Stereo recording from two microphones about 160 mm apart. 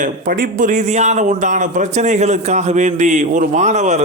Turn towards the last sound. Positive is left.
turn(degrees=-45)  # may be behind; listen again after turning